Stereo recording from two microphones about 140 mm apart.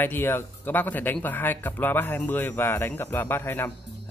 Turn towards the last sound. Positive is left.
turn(degrees=15)  # may be behind; listen again after turning